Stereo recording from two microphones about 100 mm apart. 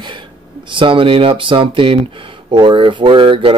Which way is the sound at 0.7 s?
60° right (ahead or behind).